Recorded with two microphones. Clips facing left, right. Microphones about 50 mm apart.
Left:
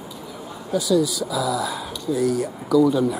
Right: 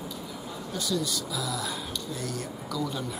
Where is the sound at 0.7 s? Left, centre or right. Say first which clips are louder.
Left 11 dB; centre.